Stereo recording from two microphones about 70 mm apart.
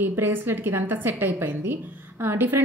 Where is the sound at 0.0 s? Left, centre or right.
Right.